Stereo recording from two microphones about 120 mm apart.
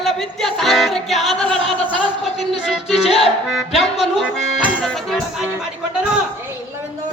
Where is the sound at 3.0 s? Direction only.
55° left (ahead or behind).